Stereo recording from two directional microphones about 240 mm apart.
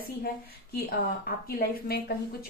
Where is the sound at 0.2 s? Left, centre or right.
Left.